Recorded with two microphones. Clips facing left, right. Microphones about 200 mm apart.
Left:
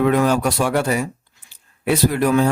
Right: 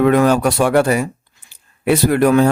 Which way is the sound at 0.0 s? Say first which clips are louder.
Right 4 dB; 65° right (ahead or behind).